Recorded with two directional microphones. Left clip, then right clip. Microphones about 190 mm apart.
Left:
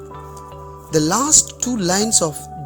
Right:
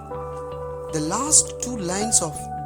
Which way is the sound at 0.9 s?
20° left (ahead or behind).